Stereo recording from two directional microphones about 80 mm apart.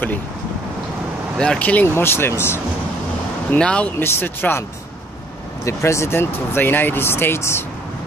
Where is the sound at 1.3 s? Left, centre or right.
Centre.